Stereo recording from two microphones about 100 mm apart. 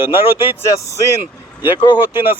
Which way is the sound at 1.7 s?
50° left (ahead or behind).